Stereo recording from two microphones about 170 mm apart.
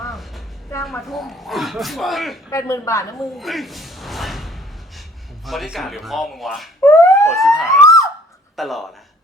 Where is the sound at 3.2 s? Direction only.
Centre (ahead or behind).